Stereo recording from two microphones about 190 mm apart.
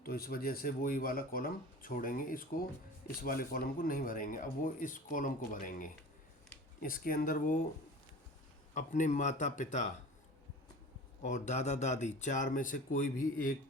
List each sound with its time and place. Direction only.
0.0 s speech: 55° left (ahead or behind)
8.7 s speech: 40° left (ahead or behind)
11.2 s speech: 40° left (ahead or behind)